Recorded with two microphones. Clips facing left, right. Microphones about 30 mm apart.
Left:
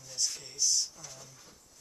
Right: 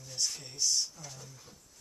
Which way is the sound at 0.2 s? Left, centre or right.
Centre.